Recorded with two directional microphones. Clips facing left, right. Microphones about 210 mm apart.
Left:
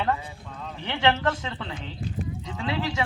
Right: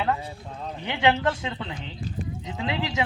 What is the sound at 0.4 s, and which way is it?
Speech, 35° right (ahead or behind).